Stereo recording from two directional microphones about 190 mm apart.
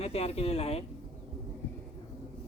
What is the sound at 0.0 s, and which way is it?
Speech, 30° left (ahead or behind).